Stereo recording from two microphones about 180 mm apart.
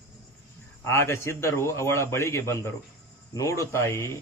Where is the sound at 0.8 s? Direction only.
15° left (ahead or behind).